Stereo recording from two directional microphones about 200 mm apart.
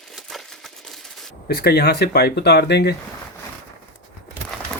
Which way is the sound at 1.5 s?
50° left (ahead or behind).